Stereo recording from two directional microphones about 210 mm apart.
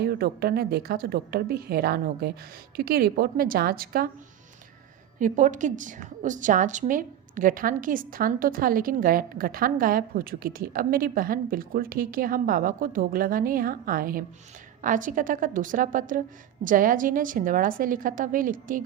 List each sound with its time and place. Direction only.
0.0 s a woman's voice: 45° right (ahead or behind)
5.2 s a woman's voice: 35° right (ahead or behind)